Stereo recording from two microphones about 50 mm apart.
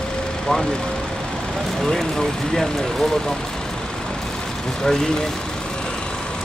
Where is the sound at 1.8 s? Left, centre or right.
Centre.